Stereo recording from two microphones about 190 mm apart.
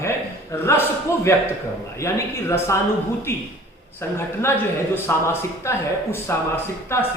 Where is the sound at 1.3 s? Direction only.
10° left (ahead or behind).